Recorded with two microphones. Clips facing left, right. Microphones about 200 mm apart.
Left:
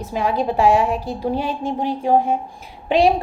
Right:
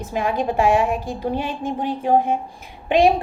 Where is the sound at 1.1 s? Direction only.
45° left (ahead or behind).